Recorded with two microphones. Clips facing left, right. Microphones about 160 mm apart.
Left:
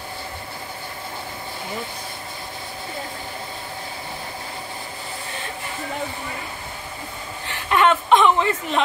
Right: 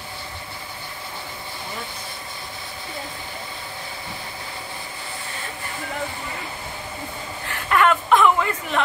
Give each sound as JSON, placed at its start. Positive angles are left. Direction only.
{"t": 7.4, "sound": "chuckle", "side_deg": 25}